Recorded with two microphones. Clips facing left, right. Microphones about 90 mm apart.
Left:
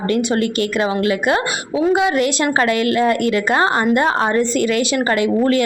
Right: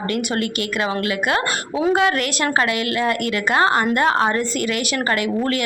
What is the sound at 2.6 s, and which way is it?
A woman's voice, 35° left (ahead or behind).